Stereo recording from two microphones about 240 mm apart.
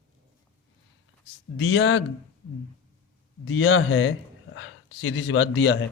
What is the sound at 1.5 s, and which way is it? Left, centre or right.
Speech, left.